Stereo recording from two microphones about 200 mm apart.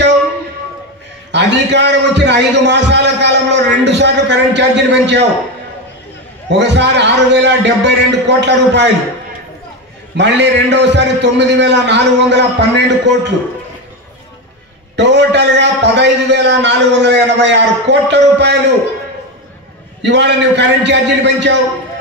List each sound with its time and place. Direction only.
1.3 s a man's voice: 60° right (ahead or behind)
6.5 s a man's voice: 60° right (ahead or behind)
10.1 s a man's voice: 60° right (ahead or behind)
15.0 s a man's voice: 60° right (ahead or behind)
20.0 s a man's voice: 60° right (ahead or behind)